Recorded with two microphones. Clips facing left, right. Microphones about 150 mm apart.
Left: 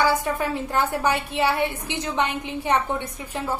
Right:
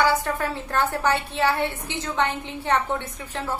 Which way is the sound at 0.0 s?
15° left (ahead or behind).